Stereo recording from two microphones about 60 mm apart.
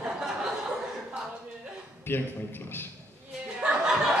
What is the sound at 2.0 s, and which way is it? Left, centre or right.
Speech, left.